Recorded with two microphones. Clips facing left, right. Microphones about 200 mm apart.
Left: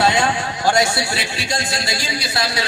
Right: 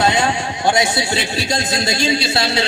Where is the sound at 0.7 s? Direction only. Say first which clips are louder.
Right 1 dB; 20° right (ahead or behind).